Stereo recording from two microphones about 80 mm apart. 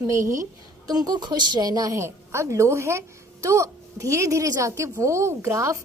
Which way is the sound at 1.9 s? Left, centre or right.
Right.